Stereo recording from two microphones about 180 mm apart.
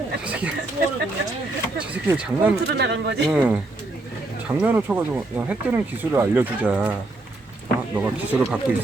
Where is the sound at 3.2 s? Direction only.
5° right (ahead or behind).